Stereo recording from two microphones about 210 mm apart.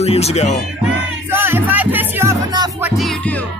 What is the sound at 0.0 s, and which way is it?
Speech, 30° left (ahead or behind).